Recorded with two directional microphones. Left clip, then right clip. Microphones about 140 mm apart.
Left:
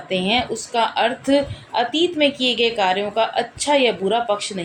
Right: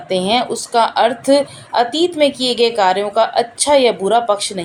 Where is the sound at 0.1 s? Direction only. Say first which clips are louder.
Right 4 dB; 50° right (ahead or behind).